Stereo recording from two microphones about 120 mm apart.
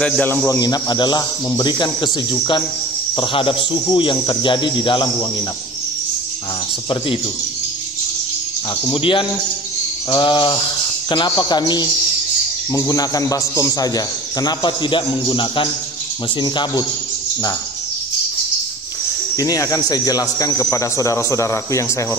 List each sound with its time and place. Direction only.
0.0 s a man's voice: 10° left (ahead or behind)
0.5 s a man's voice: 35° left (ahead or behind)
8.9 s a man's voice: 45° left (ahead or behind)
19.3 s speech: 30° left (ahead or behind)